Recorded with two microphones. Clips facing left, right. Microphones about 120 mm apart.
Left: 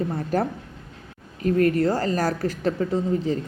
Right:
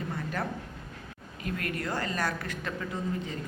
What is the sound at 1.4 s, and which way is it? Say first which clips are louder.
A woman's voice: left 14 dB; 40° left (ahead or behind).